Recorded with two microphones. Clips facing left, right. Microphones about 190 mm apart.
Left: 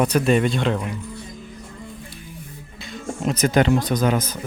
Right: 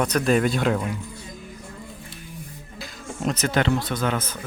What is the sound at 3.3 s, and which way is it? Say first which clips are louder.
Speech: left 5 dB; 15° left (ahead or behind).